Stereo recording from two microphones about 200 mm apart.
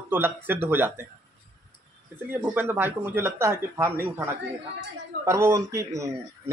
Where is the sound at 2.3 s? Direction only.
10° right (ahead or behind).